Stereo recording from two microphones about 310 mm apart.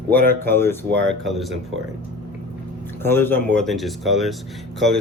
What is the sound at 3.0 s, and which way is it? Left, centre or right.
Speech, centre.